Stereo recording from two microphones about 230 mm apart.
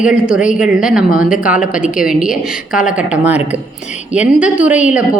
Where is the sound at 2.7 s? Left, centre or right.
Centre.